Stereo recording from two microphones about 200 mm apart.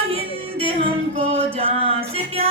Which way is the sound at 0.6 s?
30° right (ahead or behind).